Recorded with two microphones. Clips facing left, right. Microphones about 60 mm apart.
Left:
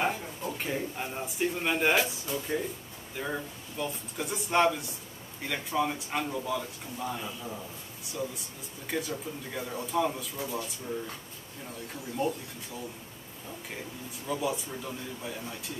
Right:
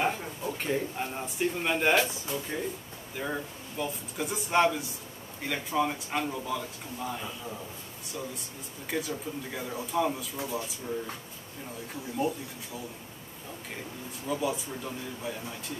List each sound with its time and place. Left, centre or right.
0.0 s a man's voice: centre
12.2 s speech: centre
14.2 s speech: centre